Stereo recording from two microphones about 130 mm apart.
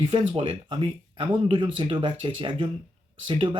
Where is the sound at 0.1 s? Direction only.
50° right (ahead or behind).